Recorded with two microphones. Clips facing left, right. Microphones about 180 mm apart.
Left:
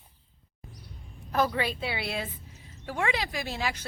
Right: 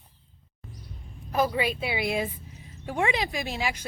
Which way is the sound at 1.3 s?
10° right (ahead or behind).